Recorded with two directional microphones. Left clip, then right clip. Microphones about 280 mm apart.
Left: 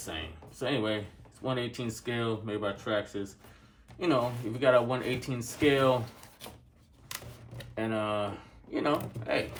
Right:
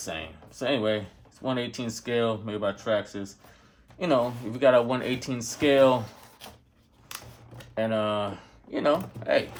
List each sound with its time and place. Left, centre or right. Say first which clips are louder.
0.0 s speech: right 4 dB; right
7.8 s speech: right 5 dB; right